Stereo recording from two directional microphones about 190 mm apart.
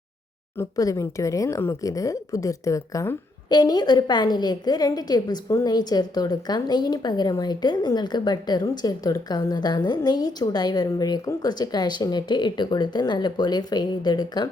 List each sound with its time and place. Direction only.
0.5 s speech: 15° left (ahead or behind)